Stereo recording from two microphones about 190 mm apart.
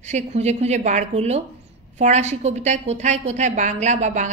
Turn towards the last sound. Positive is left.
turn(degrees=-40)  # may be behind; listen again after turning